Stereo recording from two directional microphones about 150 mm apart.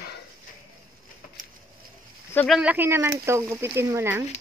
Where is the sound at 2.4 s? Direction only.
5° right (ahead or behind).